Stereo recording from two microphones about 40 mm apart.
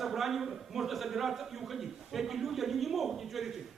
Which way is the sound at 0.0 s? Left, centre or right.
Centre.